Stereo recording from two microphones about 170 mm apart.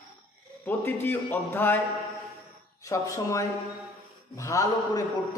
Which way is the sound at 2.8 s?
20° left (ahead or behind).